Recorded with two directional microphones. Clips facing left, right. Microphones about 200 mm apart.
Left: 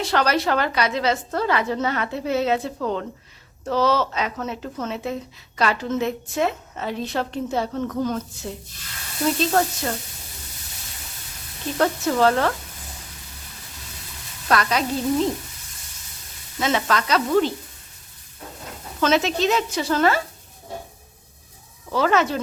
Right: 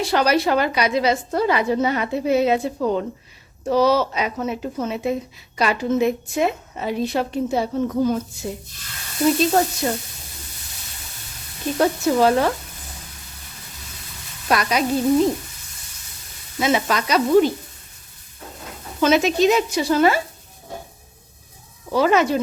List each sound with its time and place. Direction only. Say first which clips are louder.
0.0 s a woman's voice: right 3 dB; 10° right (ahead or behind)
11.8 s a woman's voice: right 2 dB; 10° right (ahead or behind)
14.4 s a woman's voice: right 1 dB; 15° right (ahead or behind)
16.6 s a woman's voice: right 2 dB; 10° right (ahead or behind)
18.9 s a woman's voice: right 3 dB; 10° right (ahead or behind)
21.8 s a woman's voice: right 3 dB; 15° right (ahead or behind)